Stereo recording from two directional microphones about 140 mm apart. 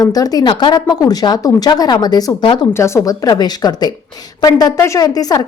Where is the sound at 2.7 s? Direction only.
20° left (ahead or behind).